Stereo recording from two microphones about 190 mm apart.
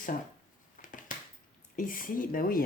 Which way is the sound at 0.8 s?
45° left (ahead or behind).